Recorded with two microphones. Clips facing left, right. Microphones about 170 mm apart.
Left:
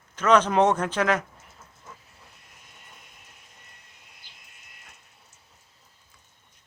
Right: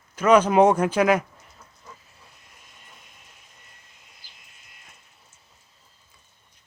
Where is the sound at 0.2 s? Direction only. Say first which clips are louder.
Right 3 dB; 10° right (ahead or behind).